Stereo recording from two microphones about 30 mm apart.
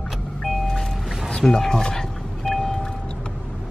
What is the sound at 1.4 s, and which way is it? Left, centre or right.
Speech, centre.